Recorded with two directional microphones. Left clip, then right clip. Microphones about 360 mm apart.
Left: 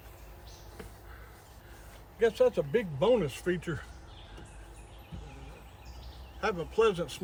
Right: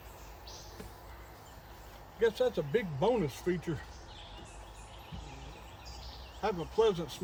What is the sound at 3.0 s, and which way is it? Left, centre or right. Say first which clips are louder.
Speech: left 5 dB; centre.